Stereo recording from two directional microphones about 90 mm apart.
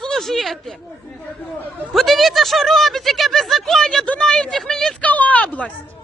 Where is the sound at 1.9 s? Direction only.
Centre (ahead or behind).